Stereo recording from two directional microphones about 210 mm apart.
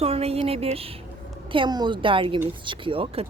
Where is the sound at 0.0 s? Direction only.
30° right (ahead or behind).